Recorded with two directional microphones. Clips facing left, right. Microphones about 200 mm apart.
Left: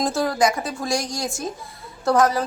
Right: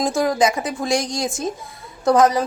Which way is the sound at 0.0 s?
15° right (ahead or behind).